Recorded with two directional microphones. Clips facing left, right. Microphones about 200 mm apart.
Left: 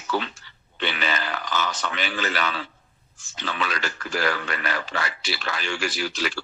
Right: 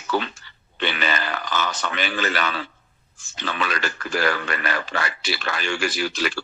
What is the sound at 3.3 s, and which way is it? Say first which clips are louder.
A man's voice: right 2 dB; 55° right (ahead or behind).